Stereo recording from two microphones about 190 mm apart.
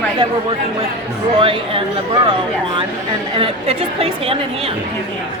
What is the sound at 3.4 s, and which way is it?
A woman's voice, 30° right (ahead or behind).